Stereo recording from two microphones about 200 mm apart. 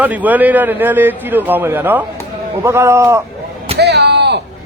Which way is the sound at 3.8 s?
55° right (ahead or behind).